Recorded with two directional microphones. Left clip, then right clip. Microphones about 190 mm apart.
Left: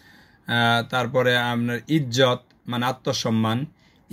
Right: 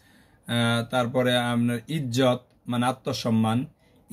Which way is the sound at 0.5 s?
20° left (ahead or behind).